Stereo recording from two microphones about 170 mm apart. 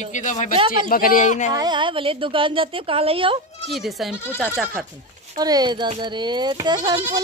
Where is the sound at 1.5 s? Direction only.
25° right (ahead or behind).